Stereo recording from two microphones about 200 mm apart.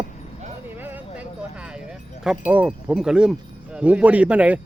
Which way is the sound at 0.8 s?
10° right (ahead or behind).